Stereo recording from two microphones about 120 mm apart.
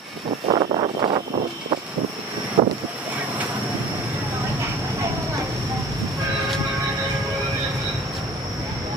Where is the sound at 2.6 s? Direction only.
45° right (ahead or behind).